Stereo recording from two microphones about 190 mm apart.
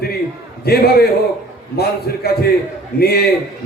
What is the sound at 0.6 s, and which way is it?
A man's voice, 55° left (ahead or behind).